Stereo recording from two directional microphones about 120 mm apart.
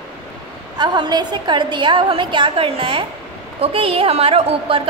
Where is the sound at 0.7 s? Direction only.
40° right (ahead or behind).